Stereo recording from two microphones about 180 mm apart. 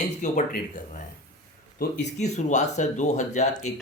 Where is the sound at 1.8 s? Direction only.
70° left (ahead or behind).